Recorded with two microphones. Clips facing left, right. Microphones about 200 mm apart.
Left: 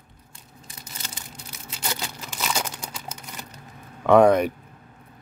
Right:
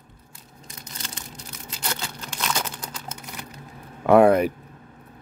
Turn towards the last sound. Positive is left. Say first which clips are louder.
# even
turn(degrees=-5)  # may be behind; listen again after turning